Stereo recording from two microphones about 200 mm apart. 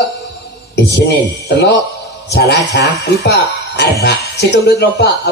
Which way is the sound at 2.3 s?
55° left (ahead or behind).